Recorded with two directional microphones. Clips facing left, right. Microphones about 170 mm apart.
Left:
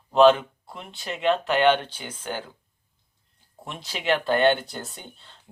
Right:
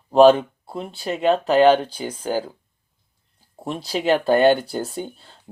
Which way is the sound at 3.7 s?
35° right (ahead or behind).